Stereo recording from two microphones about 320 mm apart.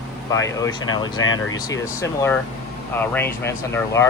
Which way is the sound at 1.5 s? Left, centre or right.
Centre.